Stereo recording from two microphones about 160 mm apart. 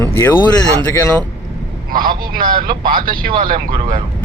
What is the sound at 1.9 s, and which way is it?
Speech, 60° right (ahead or behind).